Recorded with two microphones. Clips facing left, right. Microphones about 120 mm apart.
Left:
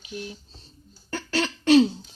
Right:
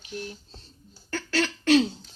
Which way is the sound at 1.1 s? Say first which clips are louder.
Even; 15° left (ahead or behind).